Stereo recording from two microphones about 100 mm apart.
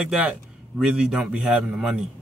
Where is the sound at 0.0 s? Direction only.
10° right (ahead or behind).